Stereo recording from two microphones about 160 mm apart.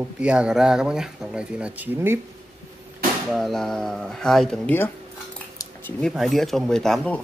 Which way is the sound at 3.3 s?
Centre (ahead or behind).